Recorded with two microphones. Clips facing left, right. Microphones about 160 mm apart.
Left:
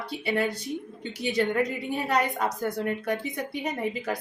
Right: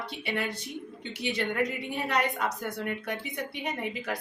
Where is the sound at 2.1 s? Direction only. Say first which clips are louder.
Left 2 dB; 40° left (ahead or behind).